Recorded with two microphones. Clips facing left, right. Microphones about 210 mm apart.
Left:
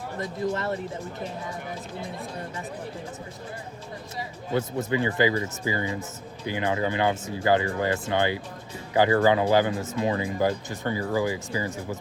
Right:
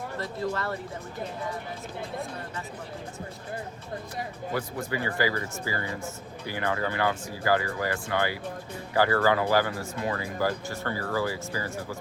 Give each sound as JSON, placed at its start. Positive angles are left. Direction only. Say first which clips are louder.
{"t": 0.5, "sound": "speech", "louder": "left 3 dB", "side_deg": 20}
{"t": 4.5, "sound": "speech", "louder": "left 6 dB", "side_deg": 20}